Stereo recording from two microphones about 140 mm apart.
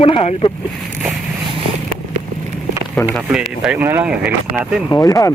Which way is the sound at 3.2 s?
5° right (ahead or behind).